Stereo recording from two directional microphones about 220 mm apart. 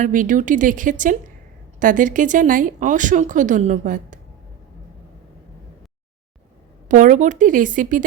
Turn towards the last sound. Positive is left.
turn(degrees=-35)  # may be behind; listen again after turning